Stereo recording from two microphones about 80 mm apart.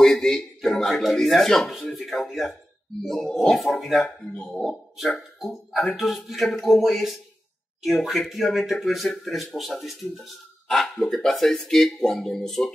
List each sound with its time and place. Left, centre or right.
0.0 s speech: centre